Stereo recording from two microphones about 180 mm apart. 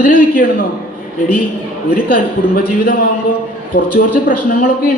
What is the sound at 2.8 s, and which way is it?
A man's voice, 50° left (ahead or behind).